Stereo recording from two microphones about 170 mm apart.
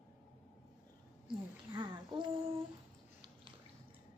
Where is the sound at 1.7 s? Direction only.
25° right (ahead or behind).